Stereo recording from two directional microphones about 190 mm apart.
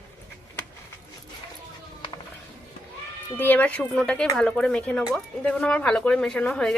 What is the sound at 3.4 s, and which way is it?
Speech, 10° left (ahead or behind).